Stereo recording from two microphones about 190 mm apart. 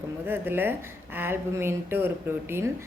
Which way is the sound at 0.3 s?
10° right (ahead or behind).